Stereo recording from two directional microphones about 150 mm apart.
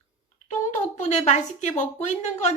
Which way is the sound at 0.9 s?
50° left (ahead or behind).